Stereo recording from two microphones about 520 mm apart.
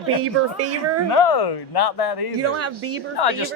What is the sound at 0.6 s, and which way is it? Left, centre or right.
Speech, right.